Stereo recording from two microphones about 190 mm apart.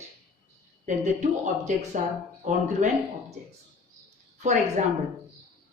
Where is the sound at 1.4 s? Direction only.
40° right (ahead or behind).